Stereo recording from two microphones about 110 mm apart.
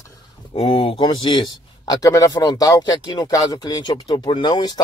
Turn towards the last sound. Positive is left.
turn(degrees=40)  # may be behind; listen again after turning